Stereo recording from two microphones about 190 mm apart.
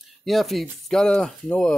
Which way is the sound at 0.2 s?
Centre (ahead or behind).